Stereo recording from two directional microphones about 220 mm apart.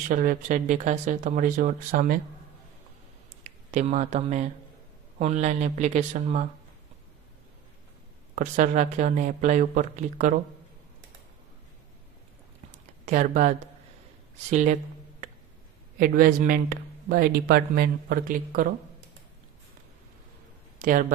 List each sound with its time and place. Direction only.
0.1 s speech: 35° right (ahead or behind)
3.4 s speech: 30° right (ahead or behind)
8.4 s speech: 35° right (ahead or behind)
13.1 s speech: 35° right (ahead or behind)
14.5 s speech: 35° right (ahead or behind)
16.0 s speech: 40° right (ahead or behind)
20.7 s speech: 40° right (ahead or behind)